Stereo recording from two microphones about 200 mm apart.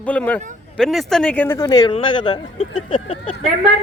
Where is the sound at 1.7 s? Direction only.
20° left (ahead or behind).